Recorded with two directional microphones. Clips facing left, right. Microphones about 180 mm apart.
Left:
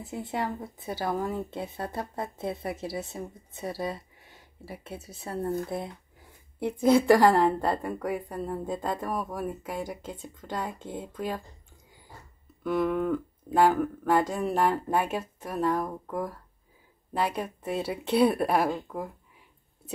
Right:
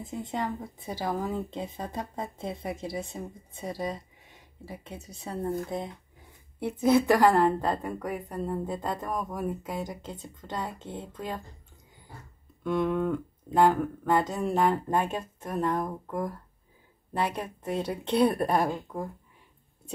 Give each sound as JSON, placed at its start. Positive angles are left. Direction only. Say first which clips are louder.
{"t": 0.0, "sound": "speech", "louder": "left 1 dB", "side_deg": 5}
{"t": 5.4, "sound": "speech", "louder": "left 1 dB", "side_deg": -20}
{"t": 6.8, "sound": "speech", "louder": "left 2 dB", "side_deg": 10}
{"t": 12.6, "sound": "speech", "louder": "left 1 dB", "side_deg": 5}